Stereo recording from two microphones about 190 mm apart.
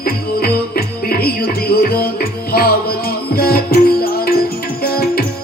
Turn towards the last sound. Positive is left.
turn(degrees=50)  # may be behind; listen again after turning